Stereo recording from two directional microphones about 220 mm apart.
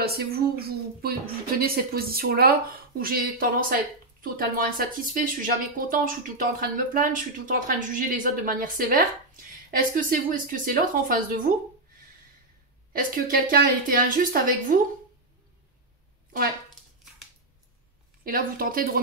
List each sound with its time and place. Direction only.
0.0 s speech: 45° right (ahead or behind)
12.9 s speech: 40° right (ahead or behind)
18.2 s speech: 40° right (ahead or behind)